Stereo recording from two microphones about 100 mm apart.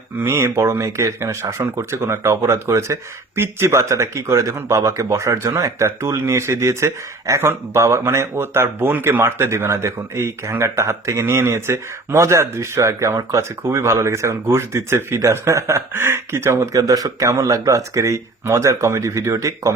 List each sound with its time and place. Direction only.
0.2 s speech: 25° right (ahead or behind)